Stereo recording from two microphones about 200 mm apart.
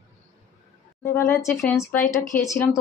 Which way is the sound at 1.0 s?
15° left (ahead or behind).